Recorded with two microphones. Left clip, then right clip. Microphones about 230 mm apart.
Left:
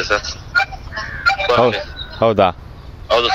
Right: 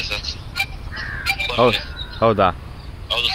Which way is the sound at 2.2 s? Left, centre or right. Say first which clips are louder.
Left 3 dB; left.